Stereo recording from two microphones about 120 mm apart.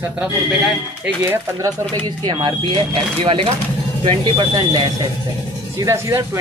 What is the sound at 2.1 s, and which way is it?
Speech, 40° right (ahead or behind).